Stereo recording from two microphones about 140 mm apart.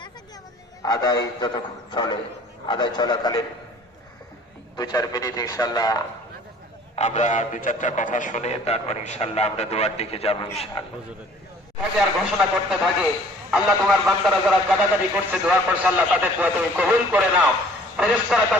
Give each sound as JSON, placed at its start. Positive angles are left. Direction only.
{"t": 0.8, "sound": "a man's voice", "side_deg": 25}
{"t": 4.8, "sound": "a man's voice", "side_deg": 30}
{"t": 6.9, "sound": "a man's voice", "side_deg": 55}
{"t": 11.9, "sound": "a man's voice", "side_deg": -5}